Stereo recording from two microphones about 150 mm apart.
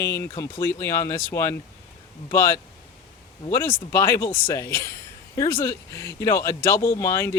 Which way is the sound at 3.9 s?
15° left (ahead or behind).